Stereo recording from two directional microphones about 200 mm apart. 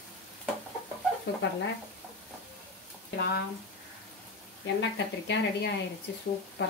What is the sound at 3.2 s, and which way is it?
Speech, 55° left (ahead or behind).